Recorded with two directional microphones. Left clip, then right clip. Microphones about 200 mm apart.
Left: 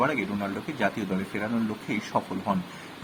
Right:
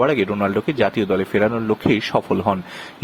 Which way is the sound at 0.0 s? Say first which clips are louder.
Right 9 dB; 45° right (ahead or behind).